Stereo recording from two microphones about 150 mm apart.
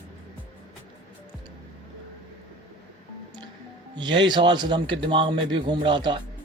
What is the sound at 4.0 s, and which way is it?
Speech, 30° right (ahead or behind).